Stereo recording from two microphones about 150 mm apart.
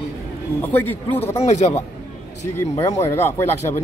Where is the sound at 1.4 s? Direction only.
50° left (ahead or behind).